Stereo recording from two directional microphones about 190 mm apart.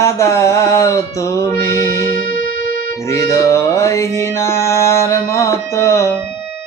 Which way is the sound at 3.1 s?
15° left (ahead or behind).